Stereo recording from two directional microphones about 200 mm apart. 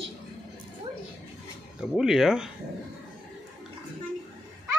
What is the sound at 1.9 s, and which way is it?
Speech, centre (ahead or behind).